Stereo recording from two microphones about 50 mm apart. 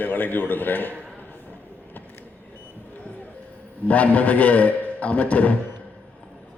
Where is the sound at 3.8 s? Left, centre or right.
Left.